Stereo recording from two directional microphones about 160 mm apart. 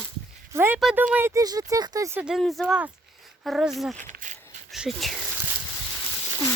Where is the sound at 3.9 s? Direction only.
55° right (ahead or behind).